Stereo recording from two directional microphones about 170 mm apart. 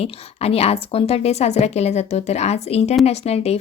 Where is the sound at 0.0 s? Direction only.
35° left (ahead or behind).